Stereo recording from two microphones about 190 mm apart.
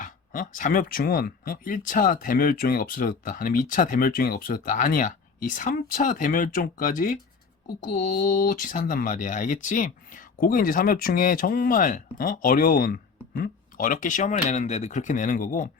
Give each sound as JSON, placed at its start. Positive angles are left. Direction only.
{"t": 0.0, "sound": "speech", "side_deg": 45}